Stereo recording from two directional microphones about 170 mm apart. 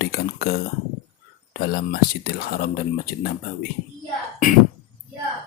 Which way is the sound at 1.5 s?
65° left (ahead or behind).